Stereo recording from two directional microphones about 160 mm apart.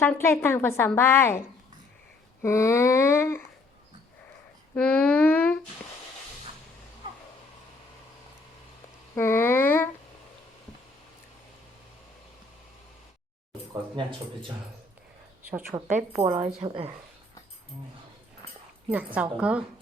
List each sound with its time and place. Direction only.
0.0 s a woman's voice: 15° left (ahead or behind)
2.4 s a woman's voice: 15° left (ahead or behind)
4.7 s a woman's voice: 10° left (ahead or behind)
7.0 s vehicle: 30° right (ahead or behind)
9.1 s speech: 15° left (ahead or behind)
13.9 s speech: 30° right (ahead or behind)
15.9 s speech: 45° right (ahead or behind)
18.9 s a woman's voice: 10° right (ahead or behind)